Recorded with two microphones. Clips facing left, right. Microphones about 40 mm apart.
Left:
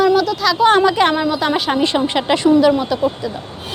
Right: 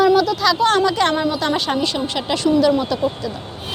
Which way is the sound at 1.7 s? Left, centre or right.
Left.